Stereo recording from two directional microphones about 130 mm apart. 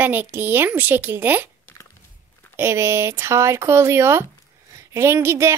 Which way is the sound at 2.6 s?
20° right (ahead or behind).